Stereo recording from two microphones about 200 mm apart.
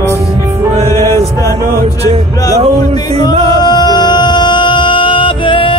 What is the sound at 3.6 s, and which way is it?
Music, 20° left (ahead or behind).